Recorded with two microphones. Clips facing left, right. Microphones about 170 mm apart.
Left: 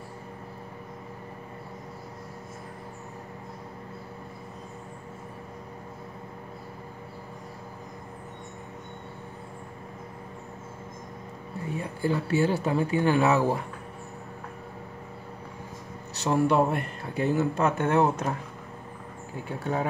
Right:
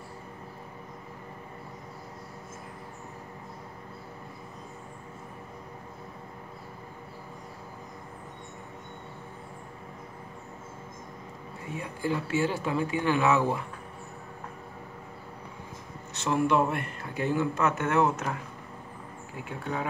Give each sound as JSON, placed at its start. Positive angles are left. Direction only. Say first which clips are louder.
{"t": 11.7, "sound": "speech", "louder": "left 2 dB", "side_deg": 35}
{"t": 16.2, "sound": "speech", "louder": "left 2 dB", "side_deg": 35}
{"t": 19.6, "sound": "speech", "louder": "left 4 dB", "side_deg": 40}